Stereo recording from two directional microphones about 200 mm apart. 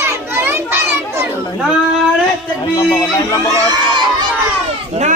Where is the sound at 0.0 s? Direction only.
10° right (ahead or behind).